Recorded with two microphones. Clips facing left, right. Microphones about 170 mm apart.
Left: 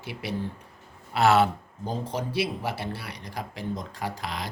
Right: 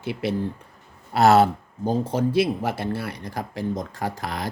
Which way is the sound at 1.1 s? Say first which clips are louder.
Right 4 dB; 40° right (ahead or behind).